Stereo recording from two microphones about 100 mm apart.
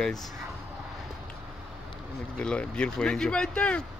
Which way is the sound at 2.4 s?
10° left (ahead or behind).